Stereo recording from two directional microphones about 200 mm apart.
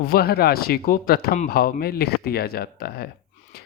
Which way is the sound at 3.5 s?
50° left (ahead or behind).